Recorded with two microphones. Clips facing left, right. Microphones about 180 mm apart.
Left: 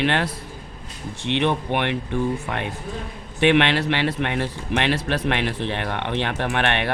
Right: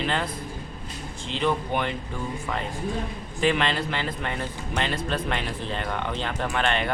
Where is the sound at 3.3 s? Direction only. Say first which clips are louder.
Left 6 dB; 70° left (ahead or behind).